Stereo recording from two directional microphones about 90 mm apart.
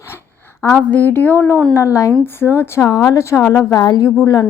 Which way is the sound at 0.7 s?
15° left (ahead or behind).